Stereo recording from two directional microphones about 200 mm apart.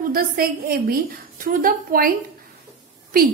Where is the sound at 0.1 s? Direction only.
45° right (ahead or behind).